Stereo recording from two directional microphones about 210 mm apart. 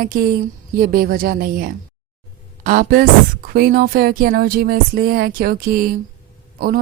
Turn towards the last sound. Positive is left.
turn(degrees=-45)  # may be behind; listen again after turning